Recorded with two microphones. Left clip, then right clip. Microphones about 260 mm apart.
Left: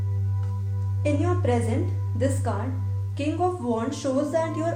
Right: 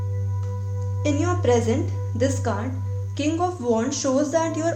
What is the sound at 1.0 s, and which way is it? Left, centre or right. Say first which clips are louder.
A woman's voice: right 3 dB; right.